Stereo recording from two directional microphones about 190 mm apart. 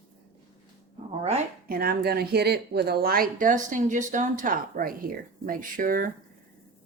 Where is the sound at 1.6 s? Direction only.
55° right (ahead or behind).